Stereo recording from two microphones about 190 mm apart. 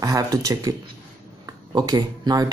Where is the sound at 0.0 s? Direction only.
20° right (ahead or behind).